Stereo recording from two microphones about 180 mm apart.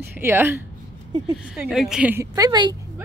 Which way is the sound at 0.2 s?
10° right (ahead or behind).